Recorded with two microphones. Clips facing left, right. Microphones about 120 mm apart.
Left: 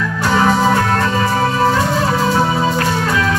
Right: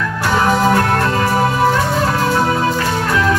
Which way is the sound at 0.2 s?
Centre (ahead or behind).